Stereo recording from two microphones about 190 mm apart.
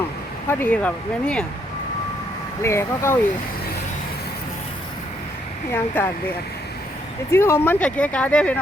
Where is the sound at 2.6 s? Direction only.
15° left (ahead or behind).